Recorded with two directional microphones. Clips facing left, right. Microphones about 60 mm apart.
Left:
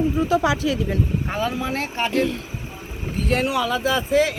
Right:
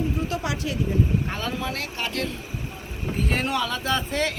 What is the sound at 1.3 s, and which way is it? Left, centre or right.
Speech, centre.